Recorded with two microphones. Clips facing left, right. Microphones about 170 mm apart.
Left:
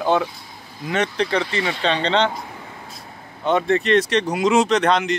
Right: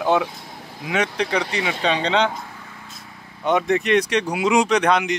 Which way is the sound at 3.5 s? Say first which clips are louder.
Left 1 dB; 15° right (ahead or behind).